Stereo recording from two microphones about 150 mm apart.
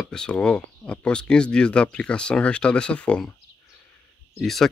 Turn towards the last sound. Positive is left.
turn(degrees=0)  # may be behind; listen again after turning